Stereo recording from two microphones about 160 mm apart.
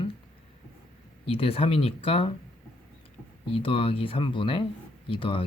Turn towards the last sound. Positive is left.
turn(degrees=35)  # may be behind; listen again after turning